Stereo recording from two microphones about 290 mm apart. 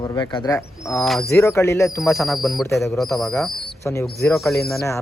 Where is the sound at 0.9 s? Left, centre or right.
Centre.